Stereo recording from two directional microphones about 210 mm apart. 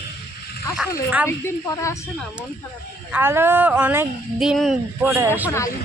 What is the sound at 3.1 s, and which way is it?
Speech, 10° right (ahead or behind).